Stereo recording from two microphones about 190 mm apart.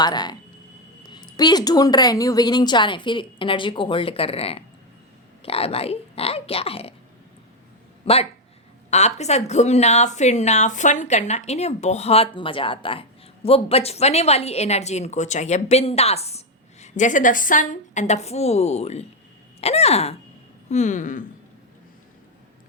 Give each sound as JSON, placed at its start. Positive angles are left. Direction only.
{"t": 0.0, "sound": "a woman's voice", "side_deg": 20}
{"t": 8.0, "sound": "a woman's voice", "side_deg": 30}